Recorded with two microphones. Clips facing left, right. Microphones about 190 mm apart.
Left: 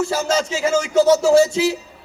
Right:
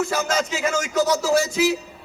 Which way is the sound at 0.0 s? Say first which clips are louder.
Left 3 dB; 30° left (ahead or behind).